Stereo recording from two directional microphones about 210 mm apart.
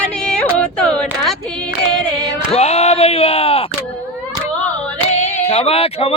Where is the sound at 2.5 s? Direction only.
30° left (ahead or behind).